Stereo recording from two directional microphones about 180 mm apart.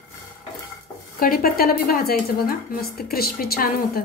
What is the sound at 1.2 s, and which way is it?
A woman's voice, 55° left (ahead or behind).